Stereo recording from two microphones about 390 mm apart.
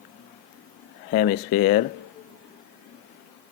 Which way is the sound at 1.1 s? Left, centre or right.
Centre.